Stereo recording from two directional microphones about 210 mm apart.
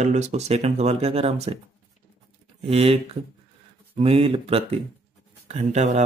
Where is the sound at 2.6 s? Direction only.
30° right (ahead or behind).